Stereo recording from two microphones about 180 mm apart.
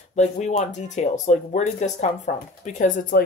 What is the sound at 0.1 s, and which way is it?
Speech, 40° left (ahead or behind).